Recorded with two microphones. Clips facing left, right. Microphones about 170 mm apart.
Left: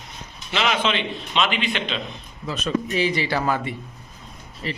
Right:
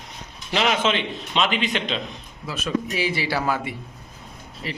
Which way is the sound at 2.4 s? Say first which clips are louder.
Left 1 dB; 5° right (ahead or behind).